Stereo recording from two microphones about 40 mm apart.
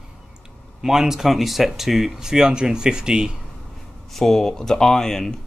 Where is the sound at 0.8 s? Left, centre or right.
Centre.